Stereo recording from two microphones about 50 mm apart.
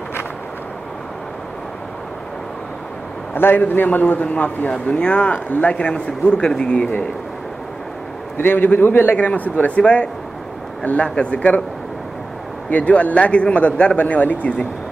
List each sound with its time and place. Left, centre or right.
3.3 s a man's voice: left; by 6.9 s centre
8.4 s a man's voice: left
9.1 s speech: left
12.6 s speech: left